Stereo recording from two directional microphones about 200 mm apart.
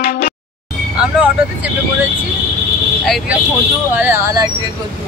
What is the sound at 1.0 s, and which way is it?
Vehicle, 5° right (ahead or behind).